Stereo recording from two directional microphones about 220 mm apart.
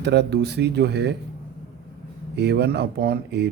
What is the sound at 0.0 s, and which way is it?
Speech, 50° right (ahead or behind).